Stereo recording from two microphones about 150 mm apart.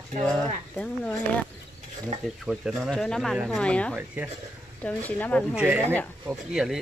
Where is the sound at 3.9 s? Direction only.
10° right (ahead or behind).